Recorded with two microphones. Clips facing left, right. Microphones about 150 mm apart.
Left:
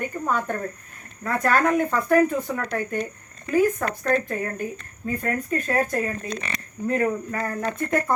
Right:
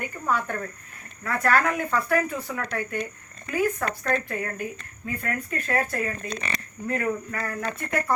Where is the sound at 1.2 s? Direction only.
20° left (ahead or behind).